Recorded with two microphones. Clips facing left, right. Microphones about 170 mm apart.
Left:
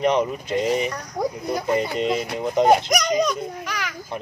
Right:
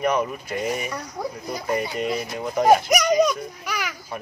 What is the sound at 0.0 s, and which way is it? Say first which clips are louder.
Speech: left 3 dB; 20° left (ahead or behind).